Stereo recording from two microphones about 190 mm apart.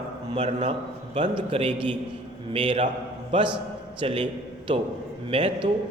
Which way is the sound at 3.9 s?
30° right (ahead or behind).